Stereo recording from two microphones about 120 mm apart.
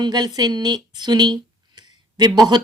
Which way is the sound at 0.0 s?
35° right (ahead or behind).